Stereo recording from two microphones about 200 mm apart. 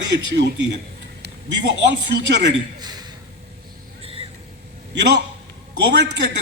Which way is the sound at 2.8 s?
20° right (ahead or behind).